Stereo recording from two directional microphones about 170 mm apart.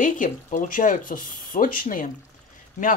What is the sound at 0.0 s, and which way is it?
Speech, 50° left (ahead or behind).